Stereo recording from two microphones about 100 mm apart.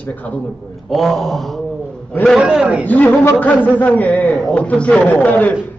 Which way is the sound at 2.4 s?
10° right (ahead or behind).